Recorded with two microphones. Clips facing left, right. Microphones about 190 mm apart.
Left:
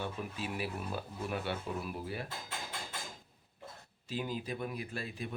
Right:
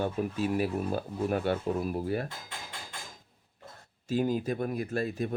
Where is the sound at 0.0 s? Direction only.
45° right (ahead or behind).